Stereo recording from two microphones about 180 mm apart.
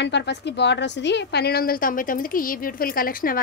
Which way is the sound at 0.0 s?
75° left (ahead or behind).